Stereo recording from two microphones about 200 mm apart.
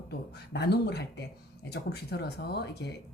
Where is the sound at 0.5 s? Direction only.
55° left (ahead or behind).